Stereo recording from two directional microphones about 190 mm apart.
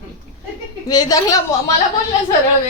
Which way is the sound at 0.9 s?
20° left (ahead or behind).